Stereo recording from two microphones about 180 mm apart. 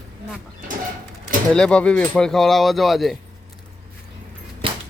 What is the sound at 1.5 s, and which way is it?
Speech, 5° left (ahead or behind).